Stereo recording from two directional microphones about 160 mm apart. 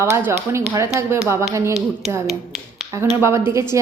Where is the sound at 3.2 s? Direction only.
15° right (ahead or behind).